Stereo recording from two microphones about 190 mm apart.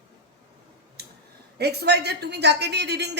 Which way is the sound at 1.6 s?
60° right (ahead or behind).